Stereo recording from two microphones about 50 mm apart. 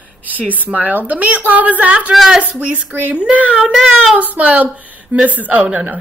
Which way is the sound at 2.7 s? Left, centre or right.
Right.